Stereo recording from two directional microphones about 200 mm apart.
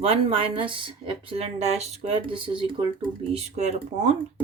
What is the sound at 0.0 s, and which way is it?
Speech, 30° right (ahead or behind).